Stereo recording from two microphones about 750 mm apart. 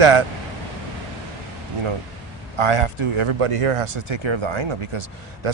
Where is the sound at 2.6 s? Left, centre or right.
Right.